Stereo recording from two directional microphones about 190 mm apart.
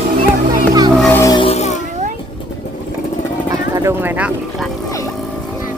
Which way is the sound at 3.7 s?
15° right (ahead or behind).